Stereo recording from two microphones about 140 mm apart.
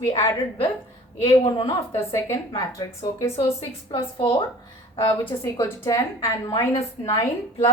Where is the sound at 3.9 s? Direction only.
40° left (ahead or behind).